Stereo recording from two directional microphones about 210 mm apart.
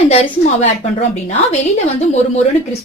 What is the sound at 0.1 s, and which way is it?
Speech, 30° left (ahead or behind).